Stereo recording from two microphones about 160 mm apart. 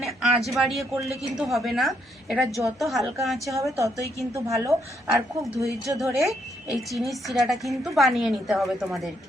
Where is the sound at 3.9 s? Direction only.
20° left (ahead or behind).